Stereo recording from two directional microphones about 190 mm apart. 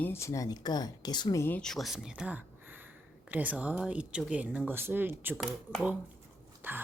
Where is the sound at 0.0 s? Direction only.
15° left (ahead or behind).